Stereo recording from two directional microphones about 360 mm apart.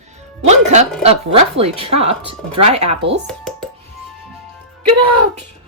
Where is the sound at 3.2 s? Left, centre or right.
Centre.